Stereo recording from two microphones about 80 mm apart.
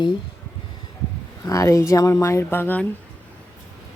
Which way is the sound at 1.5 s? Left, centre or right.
Left.